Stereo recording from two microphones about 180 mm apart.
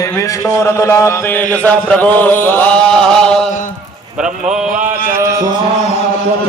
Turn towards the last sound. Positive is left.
turn(degrees=-20)  # may be behind; listen again after turning